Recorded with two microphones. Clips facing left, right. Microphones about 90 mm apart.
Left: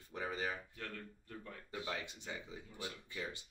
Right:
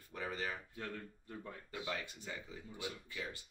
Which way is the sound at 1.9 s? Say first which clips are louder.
Right 1 dB; 20° left (ahead or behind).